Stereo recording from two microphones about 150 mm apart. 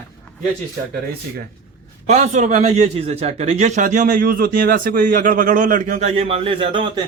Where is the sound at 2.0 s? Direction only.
50° right (ahead or behind); by 6.9 s 35° right (ahead or behind).